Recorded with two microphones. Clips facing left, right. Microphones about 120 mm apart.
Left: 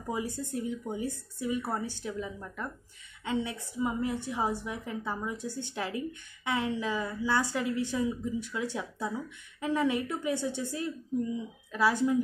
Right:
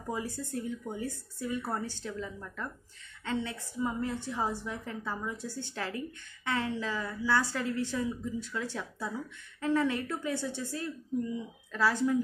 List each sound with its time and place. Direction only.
0.1 s a woman's voice: 15° left (ahead or behind)